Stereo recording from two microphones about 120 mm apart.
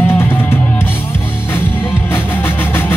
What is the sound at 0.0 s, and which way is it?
Music, 20° left (ahead or behind).